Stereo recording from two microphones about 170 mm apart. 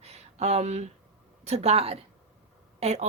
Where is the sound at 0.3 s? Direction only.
40° right (ahead or behind).